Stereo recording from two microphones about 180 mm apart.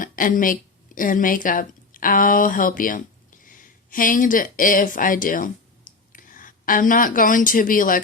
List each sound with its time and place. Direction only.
0.0 s a woman's voice: 50° left (ahead or behind)